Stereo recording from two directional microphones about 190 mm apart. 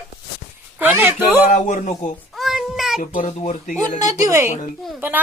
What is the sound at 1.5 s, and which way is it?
Speech, 40° left (ahead or behind).